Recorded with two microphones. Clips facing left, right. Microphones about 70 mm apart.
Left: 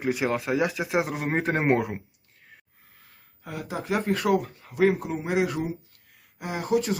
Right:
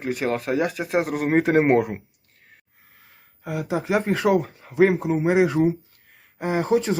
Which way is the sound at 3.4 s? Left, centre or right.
Right.